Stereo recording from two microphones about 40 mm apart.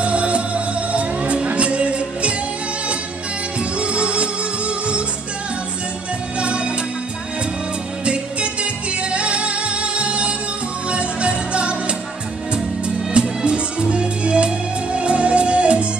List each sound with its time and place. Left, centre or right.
0.0 s music: right
3.5 s music: right
6.4 s music: right
8.0 s music: right